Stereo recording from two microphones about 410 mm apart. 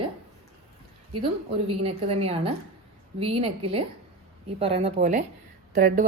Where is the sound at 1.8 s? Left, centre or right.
Centre.